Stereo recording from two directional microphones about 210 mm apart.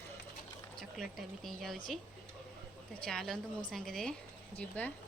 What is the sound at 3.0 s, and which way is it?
Speech, centre (ahead or behind).